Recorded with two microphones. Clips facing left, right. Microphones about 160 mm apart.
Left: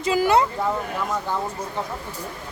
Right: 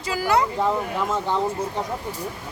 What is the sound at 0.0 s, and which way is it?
Speech, 20° left (ahead or behind).